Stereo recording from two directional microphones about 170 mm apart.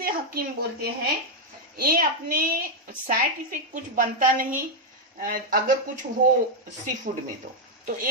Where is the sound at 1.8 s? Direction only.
60° right (ahead or behind).